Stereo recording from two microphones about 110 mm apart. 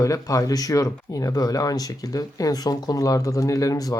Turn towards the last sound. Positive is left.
turn(degrees=30)  # may be behind; listen again after turning